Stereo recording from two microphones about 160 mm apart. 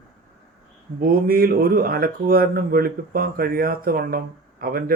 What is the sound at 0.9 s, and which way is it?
Speech, 65° right (ahead or behind).